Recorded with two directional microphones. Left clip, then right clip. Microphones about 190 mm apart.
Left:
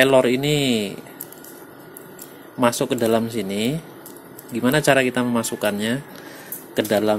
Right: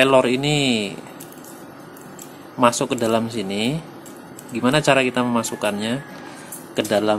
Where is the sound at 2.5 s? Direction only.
20° left (ahead or behind).